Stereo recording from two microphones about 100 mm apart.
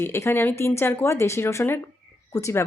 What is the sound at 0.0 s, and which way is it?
A woman's voice, 25° left (ahead or behind).